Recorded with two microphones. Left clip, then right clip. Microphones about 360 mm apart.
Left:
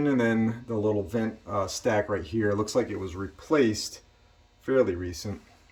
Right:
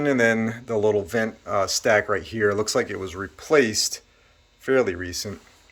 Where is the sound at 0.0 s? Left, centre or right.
Centre.